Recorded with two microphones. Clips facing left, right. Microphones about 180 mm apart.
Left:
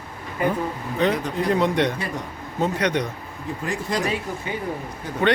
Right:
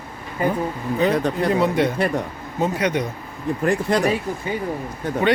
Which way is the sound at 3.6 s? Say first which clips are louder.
Right 7 dB; 60° right (ahead or behind).